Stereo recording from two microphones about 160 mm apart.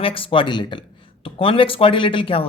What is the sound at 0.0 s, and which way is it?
A man's voice, 35° left (ahead or behind).